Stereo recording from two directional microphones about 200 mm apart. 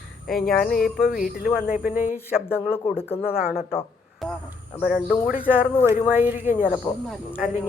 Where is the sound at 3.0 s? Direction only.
30° left (ahead or behind).